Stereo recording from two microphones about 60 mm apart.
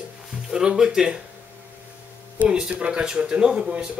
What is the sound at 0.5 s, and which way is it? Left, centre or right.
Speech, centre.